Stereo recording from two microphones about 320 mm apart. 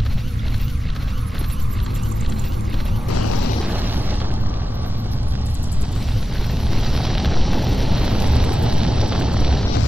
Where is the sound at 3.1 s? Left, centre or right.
Left.